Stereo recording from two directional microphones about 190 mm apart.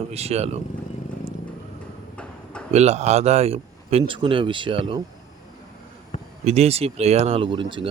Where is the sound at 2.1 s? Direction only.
5° left (ahead or behind).